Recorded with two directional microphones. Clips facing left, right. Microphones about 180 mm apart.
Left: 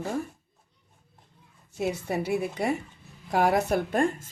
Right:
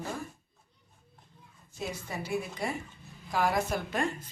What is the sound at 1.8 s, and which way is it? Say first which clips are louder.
A woman's voice: left 9 dB; 65° left (ahead or behind).